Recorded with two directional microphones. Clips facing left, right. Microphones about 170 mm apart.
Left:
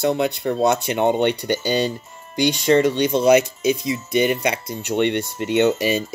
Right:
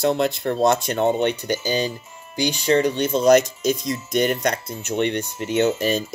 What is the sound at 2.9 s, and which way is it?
Speech, 15° left (ahead or behind).